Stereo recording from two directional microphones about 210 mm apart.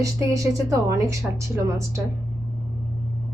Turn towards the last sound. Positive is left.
turn(degrees=-15)  # may be behind; listen again after turning